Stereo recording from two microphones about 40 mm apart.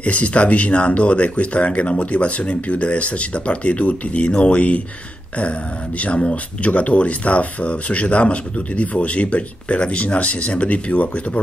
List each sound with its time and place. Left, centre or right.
0.0 s speech: left
5.9 s speech: left